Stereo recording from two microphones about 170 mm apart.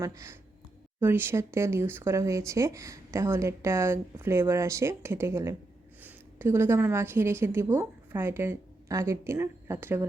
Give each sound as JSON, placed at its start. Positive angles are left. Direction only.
{"t": 0.0, "sound": "a woman's voice", "side_deg": -15}